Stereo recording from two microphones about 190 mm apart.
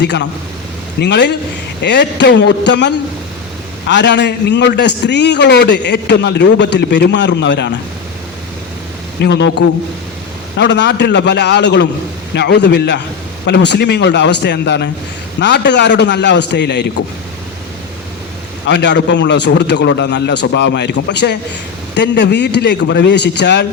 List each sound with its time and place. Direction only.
0.0 s a man's voice: 65° left (ahead or behind)
9.2 s a man's voice: 65° left (ahead or behind)
18.7 s a man's voice: 65° left (ahead or behind)